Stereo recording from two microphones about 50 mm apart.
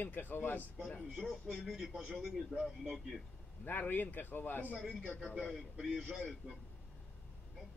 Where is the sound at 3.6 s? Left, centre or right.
Left.